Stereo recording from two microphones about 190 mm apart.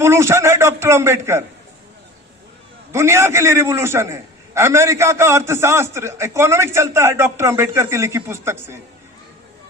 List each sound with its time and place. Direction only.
0.0 s a man's voice: 15° right (ahead or behind)
2.9 s a man's voice: 15° right (ahead or behind)